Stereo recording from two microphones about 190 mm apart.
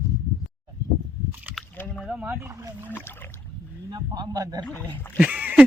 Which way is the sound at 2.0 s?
5° right (ahead or behind).